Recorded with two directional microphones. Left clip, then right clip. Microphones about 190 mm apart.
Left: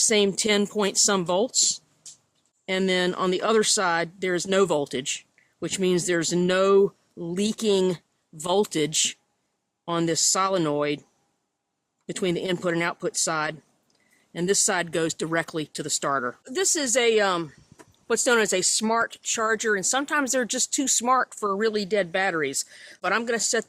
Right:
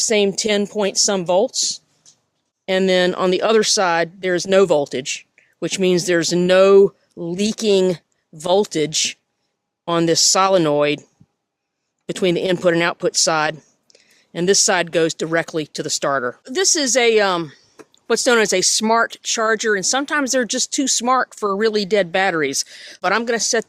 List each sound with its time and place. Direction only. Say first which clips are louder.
0.0 s speech: right 5 dB; 25° right (ahead or behind)
2.6 s speech: right 8 dB; 35° right (ahead or behind)
12.0 s speech: right 8 dB; 35° right (ahead or behind)